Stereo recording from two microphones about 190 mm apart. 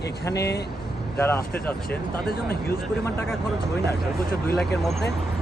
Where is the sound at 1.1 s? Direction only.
15° left (ahead or behind).